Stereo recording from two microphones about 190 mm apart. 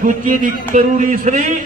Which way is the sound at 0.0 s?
45° right (ahead or behind).